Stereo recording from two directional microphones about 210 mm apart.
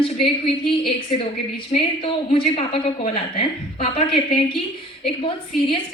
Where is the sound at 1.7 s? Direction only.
25° left (ahead or behind).